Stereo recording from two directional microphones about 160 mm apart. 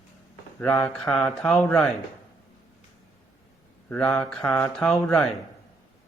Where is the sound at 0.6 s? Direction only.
5° left (ahead or behind).